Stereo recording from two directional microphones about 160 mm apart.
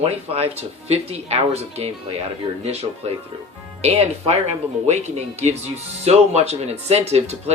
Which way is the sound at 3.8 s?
40° right (ahead or behind).